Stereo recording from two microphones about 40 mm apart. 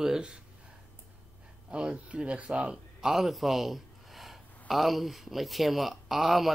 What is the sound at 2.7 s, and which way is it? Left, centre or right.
Speech, centre.